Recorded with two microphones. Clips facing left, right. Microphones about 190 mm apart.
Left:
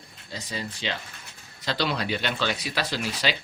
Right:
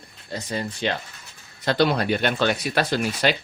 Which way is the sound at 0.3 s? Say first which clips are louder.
Right 6 dB; 55° right (ahead or behind).